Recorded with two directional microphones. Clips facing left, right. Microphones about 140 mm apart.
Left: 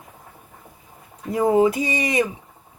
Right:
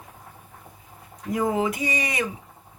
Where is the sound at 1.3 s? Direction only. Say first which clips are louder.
Left 7 dB; 30° left (ahead or behind).